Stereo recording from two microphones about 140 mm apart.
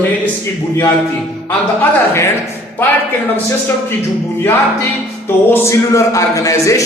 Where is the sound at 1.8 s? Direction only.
20° left (ahead or behind).